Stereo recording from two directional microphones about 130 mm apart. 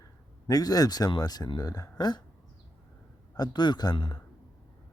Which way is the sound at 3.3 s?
35° left (ahead or behind).